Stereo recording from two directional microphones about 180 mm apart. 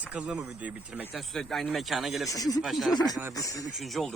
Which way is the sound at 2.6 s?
Centre (ahead or behind).